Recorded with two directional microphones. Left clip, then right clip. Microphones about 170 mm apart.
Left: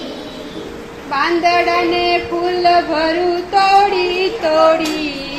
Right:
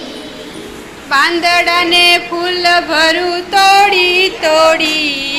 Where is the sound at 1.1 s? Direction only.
5° right (ahead or behind).